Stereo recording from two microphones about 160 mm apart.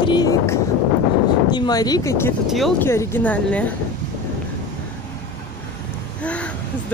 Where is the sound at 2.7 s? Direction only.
15° left (ahead or behind).